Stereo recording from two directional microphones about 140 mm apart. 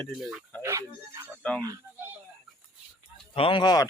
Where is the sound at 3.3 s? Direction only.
40° left (ahead or behind).